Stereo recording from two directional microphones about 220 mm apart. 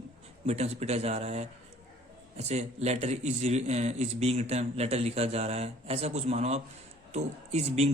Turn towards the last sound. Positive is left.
turn(degrees=-30)  # may be behind; listen again after turning